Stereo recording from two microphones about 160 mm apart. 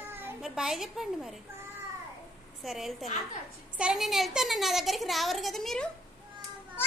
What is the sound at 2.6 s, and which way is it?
A child's voice, centre (ahead or behind).